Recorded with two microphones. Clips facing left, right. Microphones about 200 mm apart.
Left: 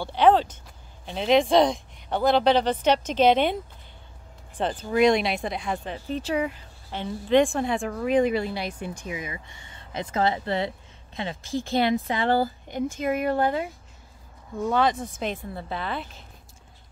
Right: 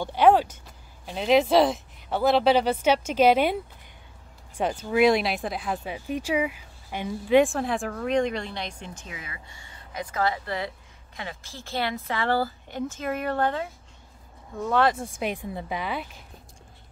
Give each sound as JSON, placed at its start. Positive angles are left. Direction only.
{"t": 0.0, "sound": "a woman's voice", "side_deg": -10}
{"t": 14.6, "sound": "speech", "side_deg": 0}